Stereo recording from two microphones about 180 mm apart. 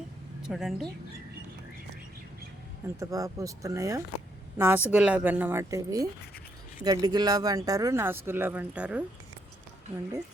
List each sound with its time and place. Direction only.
0.4 s speech: centre (ahead or behind)
2.8 s speech: 20° right (ahead or behind)